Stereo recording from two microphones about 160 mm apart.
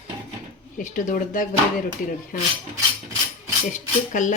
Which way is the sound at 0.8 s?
55° left (ahead or behind).